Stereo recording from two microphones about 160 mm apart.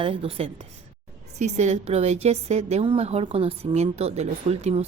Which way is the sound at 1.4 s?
45° right (ahead or behind).